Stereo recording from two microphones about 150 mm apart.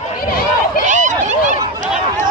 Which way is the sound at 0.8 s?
55° right (ahead or behind).